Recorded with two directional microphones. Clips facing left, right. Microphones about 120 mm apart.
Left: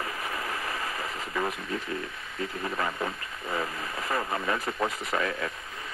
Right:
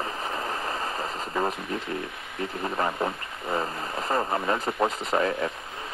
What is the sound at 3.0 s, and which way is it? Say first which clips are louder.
Speech: right 4 dB; 25° right (ahead or behind).